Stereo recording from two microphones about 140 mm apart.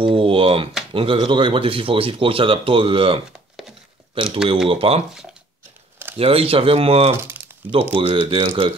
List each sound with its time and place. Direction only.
0.0 s a sound: 40° right (ahead or behind)
0.9 s speech: 40° right (ahead or behind)
6.1 s speech: 45° right (ahead or behind)